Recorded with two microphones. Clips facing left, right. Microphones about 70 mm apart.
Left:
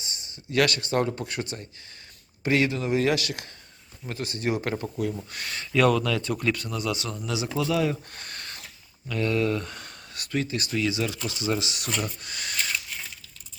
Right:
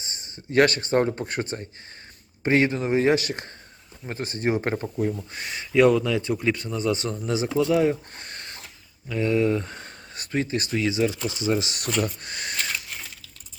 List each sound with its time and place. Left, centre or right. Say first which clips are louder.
0.0 s a man's voice: right 1 dB; right
5.3 s a man's voice: right 3 dB; centre
8.1 s a sound: right 1 dB; right
9.0 s speech: right 3 dB; centre
11.6 s a man's voice: right 4 dB; right